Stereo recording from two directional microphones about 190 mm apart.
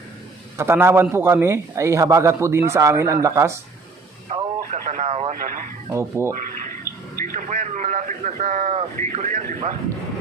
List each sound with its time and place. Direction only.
0.5 s a man's voice: 10° right (ahead or behind)
4.3 s speech: 35° right (ahead or behind)
5.9 s a man's voice: 15° right (ahead or behind)
7.2 s a man's voice: 45° right (ahead or behind)